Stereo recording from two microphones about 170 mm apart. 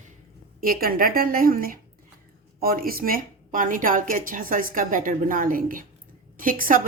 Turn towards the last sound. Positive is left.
turn(degrees=-55)  # may be behind; listen again after turning